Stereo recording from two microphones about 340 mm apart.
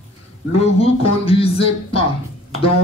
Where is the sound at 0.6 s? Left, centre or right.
Centre.